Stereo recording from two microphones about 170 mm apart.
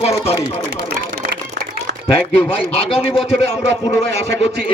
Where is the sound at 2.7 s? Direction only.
35° left (ahead or behind).